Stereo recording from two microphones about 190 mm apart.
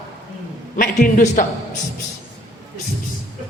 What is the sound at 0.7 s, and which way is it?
Speech, 45° left (ahead or behind).